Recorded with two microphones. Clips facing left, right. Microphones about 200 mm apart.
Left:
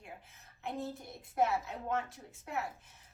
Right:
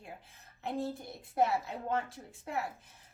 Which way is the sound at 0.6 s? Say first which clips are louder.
Right 4 dB; 30° right (ahead or behind).